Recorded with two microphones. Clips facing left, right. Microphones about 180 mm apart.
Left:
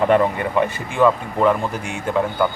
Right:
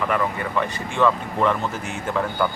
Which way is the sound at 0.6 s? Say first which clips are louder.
Left 4 dB; 15° left (ahead or behind).